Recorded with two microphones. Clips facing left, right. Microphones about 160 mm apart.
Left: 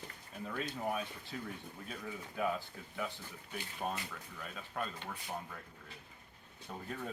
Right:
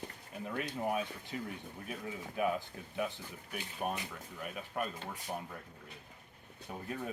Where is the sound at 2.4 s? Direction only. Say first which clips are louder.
Right 3 dB; 15° right (ahead or behind).